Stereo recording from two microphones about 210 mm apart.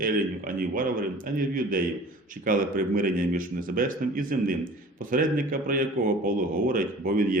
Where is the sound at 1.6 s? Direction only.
40° right (ahead or behind).